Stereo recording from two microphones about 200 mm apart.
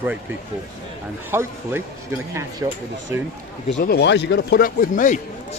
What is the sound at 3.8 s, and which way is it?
Speech, 55° left (ahead or behind).